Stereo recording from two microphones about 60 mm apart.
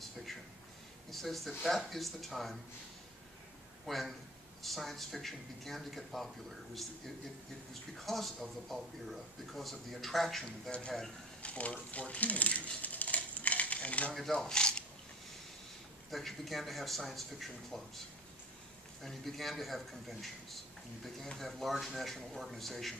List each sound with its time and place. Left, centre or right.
1.1 s speech: centre
3.8 s a man's voice: centre
8.0 s speech: centre
11.4 s a sound: left
14.1 s speech: centre
14.5 s a sound: centre
16.1 s speech: centre
19.0 s speech: centre